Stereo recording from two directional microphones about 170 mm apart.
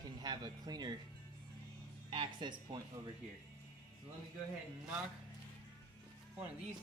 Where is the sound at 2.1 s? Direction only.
30° right (ahead or behind).